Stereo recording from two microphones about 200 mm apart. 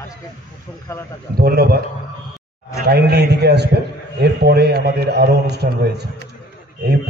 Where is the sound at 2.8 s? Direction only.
55° right (ahead or behind).